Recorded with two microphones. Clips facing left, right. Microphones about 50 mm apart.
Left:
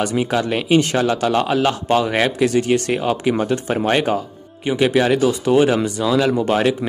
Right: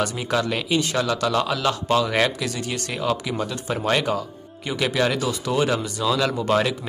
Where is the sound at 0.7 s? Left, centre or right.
Left.